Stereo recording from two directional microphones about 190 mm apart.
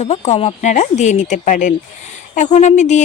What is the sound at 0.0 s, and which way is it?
Speech, 35° left (ahead or behind).